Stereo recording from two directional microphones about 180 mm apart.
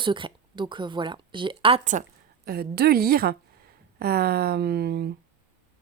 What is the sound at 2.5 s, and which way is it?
Speech, 60° right (ahead or behind).